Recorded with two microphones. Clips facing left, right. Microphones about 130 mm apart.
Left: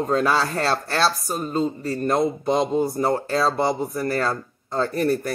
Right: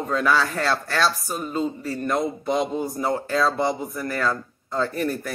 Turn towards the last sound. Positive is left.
turn(degrees=35)  # may be behind; listen again after turning